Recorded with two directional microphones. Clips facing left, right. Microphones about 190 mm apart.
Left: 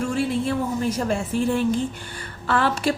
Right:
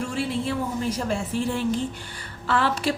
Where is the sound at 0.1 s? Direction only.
50° left (ahead or behind).